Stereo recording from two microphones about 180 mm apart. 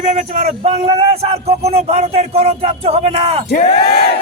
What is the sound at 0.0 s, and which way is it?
Speech, 40° right (ahead or behind).